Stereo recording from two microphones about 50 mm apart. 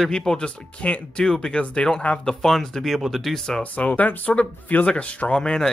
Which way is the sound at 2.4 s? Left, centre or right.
Centre.